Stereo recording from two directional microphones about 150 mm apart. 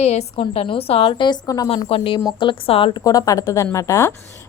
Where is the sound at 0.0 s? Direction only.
45° left (ahead or behind).